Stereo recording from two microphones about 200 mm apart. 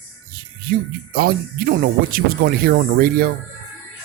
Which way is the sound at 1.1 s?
45° right (ahead or behind).